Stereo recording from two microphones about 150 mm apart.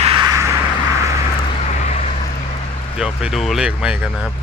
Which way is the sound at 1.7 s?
50° left (ahead or behind).